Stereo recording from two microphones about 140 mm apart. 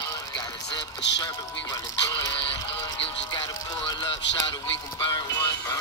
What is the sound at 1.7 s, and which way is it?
Music, 25° left (ahead or behind).